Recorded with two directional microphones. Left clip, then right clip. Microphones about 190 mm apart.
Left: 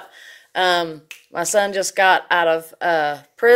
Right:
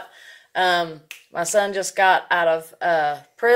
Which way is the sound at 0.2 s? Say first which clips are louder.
Left 1 dB; 45° left (ahead or behind).